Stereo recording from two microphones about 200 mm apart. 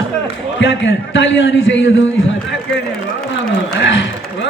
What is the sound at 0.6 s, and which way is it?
A man's voice, 65° left (ahead or behind).